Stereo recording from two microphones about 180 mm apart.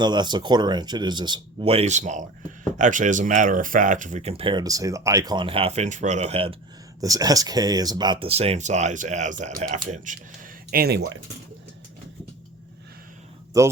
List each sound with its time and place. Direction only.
0.0 s speech: 25° right (ahead or behind)
7.0 s speech: 20° right (ahead or behind); by 11.2 s 80° right